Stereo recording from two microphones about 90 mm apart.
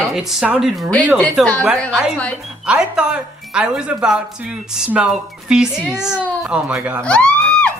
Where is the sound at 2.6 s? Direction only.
10° right (ahead or behind).